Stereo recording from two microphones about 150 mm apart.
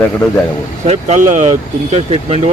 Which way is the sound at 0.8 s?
45° right (ahead or behind).